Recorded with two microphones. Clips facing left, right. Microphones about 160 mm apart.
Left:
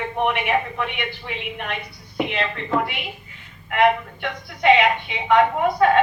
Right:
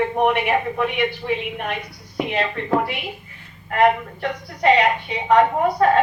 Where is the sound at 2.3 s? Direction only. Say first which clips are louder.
Right 6 dB; 35° right (ahead or behind).